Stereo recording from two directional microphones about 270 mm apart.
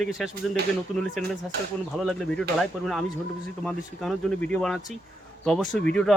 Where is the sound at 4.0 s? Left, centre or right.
Centre.